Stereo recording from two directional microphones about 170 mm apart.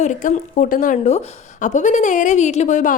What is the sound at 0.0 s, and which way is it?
A woman's voice, 45° left (ahead or behind).